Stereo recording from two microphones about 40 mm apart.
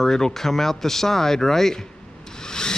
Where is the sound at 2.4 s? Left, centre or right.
Centre.